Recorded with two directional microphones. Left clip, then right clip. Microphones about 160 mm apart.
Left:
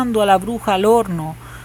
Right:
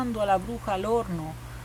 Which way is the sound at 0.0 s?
30° left (ahead or behind).